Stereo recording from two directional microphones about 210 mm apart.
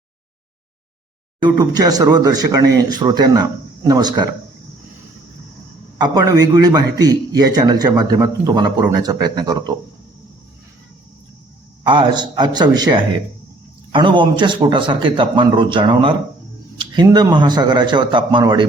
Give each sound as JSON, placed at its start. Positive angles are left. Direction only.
{"t": 1.5, "sound": "a man's voice", "side_deg": -20}
{"t": 6.0, "sound": "a man's voice", "side_deg": -15}
{"t": 11.9, "sound": "a man's voice", "side_deg": -20}